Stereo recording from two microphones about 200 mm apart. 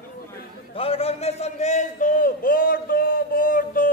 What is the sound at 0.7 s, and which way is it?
A man's voice, 30° left (ahead or behind).